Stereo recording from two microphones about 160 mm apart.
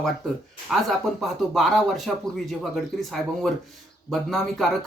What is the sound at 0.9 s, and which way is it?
Speech, centre (ahead or behind).